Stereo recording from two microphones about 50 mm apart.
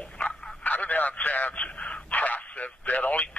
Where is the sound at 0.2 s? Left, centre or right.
Left.